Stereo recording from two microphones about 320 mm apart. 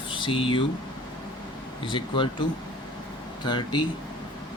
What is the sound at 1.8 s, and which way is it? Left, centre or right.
Speech, centre.